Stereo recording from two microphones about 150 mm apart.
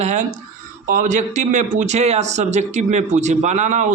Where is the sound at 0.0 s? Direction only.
50° right (ahead or behind).